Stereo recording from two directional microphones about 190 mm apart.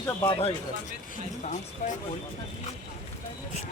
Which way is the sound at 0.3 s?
30° left (ahead or behind).